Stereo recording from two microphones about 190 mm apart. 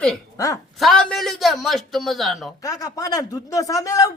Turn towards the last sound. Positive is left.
turn(degrees=15)  # may be behind; listen again after turning